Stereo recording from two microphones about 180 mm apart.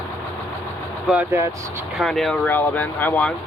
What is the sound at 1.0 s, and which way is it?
Speech, 5° right (ahead or behind).